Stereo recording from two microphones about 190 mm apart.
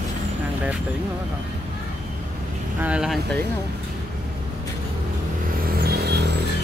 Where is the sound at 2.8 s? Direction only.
5° right (ahead or behind).